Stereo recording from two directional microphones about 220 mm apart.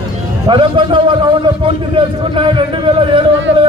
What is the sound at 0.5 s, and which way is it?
A man's voice, 20° right (ahead or behind).